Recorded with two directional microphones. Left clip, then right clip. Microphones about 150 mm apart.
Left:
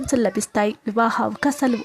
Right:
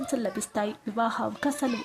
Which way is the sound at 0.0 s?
35° left (ahead or behind).